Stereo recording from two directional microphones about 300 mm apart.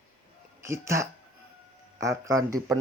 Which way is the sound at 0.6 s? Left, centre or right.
Centre.